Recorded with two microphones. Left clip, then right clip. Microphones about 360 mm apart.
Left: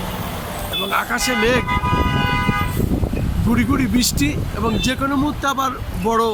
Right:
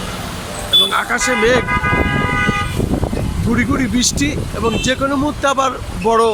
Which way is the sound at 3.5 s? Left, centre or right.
Centre.